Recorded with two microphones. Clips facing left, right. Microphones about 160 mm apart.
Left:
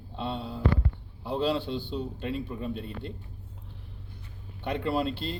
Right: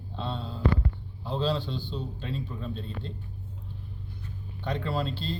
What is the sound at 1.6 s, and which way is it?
Speech, 60° left (ahead or behind).